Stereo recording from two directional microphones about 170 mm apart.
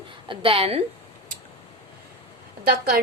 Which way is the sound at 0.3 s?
35° right (ahead or behind).